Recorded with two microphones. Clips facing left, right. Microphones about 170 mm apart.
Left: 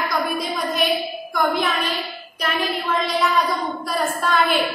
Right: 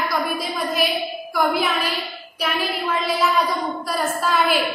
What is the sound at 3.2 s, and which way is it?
A woman's voice, centre (ahead or behind).